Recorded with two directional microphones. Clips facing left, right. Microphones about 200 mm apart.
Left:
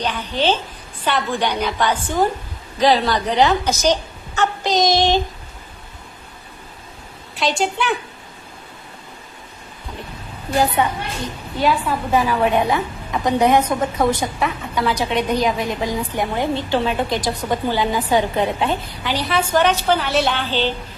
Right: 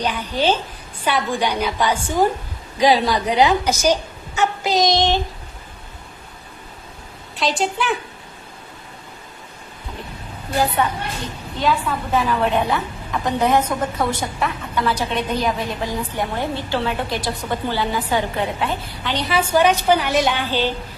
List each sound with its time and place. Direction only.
0.0 s a woman's voice: 10° right (ahead or behind)
4.9 s a woman's voice: 10° left (ahead or behind)
7.3 s a woman's voice: centre (ahead or behind)
11.6 s a woman's voice: 10° left (ahead or behind)
19.0 s a woman's voice: 5° left (ahead or behind)
19.3 s a woman's voice: 10° right (ahead or behind)